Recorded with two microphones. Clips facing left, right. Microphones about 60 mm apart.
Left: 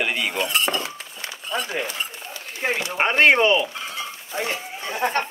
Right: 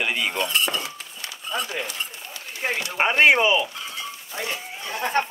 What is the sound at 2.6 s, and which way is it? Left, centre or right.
Speech, centre.